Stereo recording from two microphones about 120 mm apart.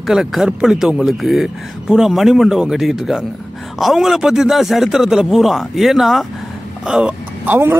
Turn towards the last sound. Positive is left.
turn(degrees=-15)  # may be behind; listen again after turning